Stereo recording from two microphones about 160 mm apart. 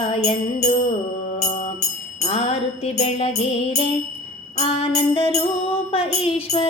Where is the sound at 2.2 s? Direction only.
40° left (ahead or behind).